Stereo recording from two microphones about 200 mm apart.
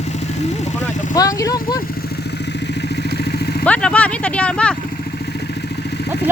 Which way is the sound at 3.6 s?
5° left (ahead or behind).